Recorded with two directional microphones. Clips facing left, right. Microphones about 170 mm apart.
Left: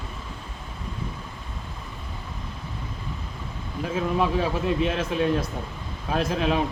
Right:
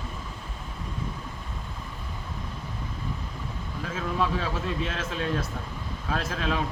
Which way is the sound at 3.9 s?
15° left (ahead or behind).